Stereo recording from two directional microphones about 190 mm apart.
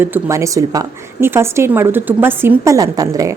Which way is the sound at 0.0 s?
15° right (ahead or behind).